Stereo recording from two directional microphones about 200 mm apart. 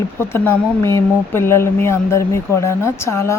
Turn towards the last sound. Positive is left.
turn(degrees=15)  # may be behind; listen again after turning